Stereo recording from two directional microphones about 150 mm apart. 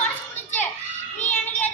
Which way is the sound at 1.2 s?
10° left (ahead or behind).